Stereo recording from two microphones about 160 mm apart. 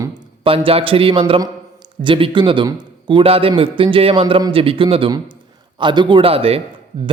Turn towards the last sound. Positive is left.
turn(degrees=-35)  # may be behind; listen again after turning